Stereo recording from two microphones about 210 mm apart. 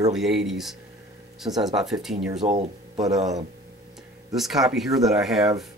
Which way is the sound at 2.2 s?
Centre (ahead or behind).